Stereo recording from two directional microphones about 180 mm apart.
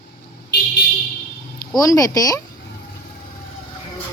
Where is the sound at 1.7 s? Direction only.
20° left (ahead or behind).